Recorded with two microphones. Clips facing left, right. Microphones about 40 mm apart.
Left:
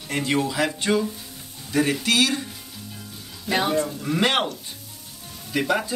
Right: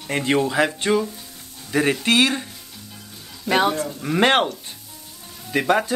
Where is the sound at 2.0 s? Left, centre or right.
Right.